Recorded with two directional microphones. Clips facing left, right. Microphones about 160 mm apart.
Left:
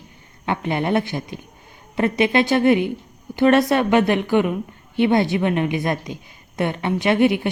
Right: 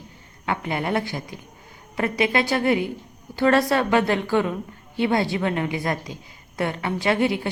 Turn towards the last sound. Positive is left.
turn(degrees=20)  # may be behind; listen again after turning